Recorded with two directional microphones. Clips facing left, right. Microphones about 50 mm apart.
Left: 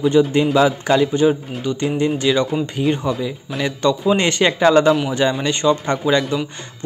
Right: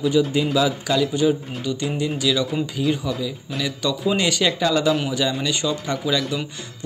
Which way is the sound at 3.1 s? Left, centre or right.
Left.